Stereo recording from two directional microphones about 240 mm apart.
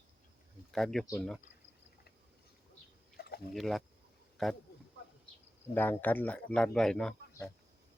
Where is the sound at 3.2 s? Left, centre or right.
Left.